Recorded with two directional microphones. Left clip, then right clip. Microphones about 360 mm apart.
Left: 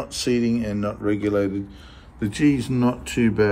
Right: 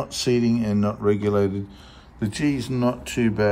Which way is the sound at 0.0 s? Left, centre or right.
Centre.